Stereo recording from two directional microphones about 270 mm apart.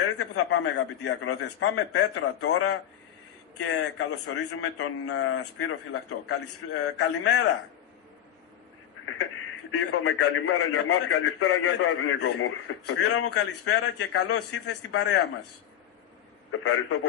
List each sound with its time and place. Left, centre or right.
0.2 s a man's voice: left
9.0 s a man's voice: left
16.6 s a man's voice: left